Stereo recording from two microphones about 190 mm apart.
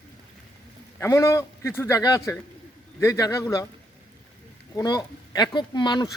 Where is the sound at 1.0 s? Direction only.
15° left (ahead or behind).